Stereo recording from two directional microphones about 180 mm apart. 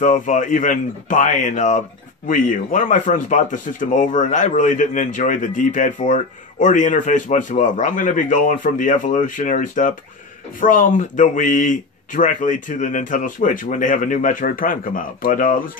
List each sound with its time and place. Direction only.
0.0 s speech: 45° left (ahead or behind)